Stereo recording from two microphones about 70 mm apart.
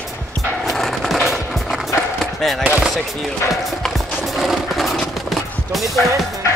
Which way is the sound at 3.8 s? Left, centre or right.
Centre.